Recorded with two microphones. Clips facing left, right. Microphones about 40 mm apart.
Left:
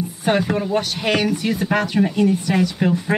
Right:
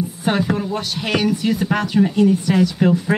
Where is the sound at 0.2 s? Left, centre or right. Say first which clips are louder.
Left 1 dB; centre.